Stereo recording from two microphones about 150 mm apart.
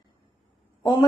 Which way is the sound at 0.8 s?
25° left (ahead or behind).